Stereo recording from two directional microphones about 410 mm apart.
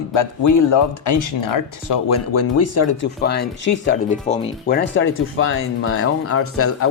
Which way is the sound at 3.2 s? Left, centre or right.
Left.